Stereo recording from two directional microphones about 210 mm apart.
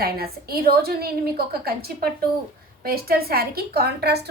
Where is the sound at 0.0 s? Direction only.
45° right (ahead or behind).